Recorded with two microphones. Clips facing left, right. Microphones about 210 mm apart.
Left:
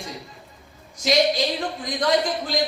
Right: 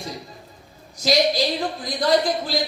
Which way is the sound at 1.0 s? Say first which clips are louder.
Right 1 dB; 35° right (ahead or behind).